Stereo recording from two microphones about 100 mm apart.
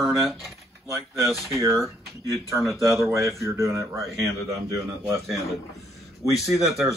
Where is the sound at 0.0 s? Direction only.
Centre (ahead or behind).